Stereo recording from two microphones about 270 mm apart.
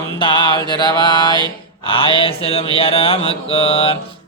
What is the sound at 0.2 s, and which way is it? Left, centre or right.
Mantra, centre.